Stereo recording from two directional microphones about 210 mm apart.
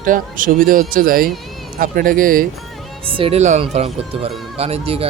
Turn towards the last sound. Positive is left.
turn(degrees=-30)  # may be behind; listen again after turning